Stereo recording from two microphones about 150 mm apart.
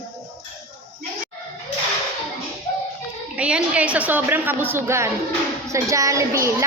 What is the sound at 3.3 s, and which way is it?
A woman's voice, 10° right (ahead or behind).